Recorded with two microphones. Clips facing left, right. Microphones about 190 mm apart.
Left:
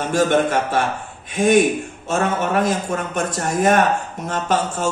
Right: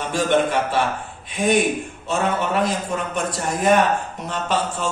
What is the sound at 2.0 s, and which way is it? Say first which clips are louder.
Speech: left 2 dB; 50° left (ahead or behind).